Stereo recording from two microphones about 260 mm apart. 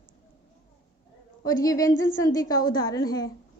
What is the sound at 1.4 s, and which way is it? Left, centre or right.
A woman's voice, centre.